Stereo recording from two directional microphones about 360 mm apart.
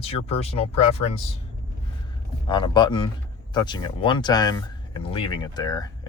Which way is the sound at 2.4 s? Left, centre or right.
Centre.